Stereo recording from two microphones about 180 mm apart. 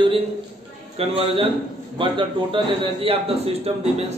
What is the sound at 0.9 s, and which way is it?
A man's voice, 35° right (ahead or behind).